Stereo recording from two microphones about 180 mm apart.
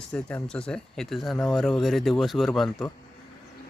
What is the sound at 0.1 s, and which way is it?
Speech, 5° left (ahead or behind).